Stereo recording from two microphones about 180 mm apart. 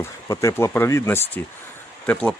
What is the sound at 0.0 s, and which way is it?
Speech, 15° left (ahead or behind).